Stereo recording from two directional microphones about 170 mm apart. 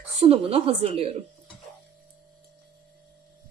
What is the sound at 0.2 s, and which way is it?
Speech, 35° right (ahead or behind).